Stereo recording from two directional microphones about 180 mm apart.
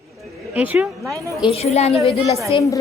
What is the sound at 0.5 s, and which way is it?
Speech, 10° right (ahead or behind).